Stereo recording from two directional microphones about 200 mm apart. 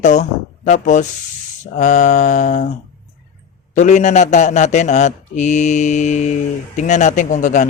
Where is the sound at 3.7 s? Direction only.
35° left (ahead or behind).